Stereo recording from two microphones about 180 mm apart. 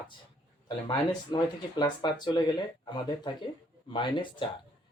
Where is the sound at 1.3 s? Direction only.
25° left (ahead or behind).